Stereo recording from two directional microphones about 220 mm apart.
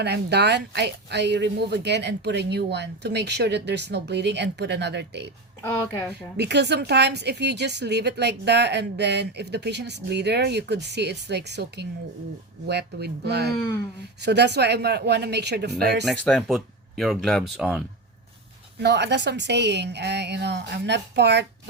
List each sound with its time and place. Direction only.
0.0 s a woman's voice: 50° right (ahead or behind)
6.3 s a woman's voice: 50° right (ahead or behind)
16.0 s speech: centre (ahead or behind)
18.8 s a woman's voice: 50° right (ahead or behind)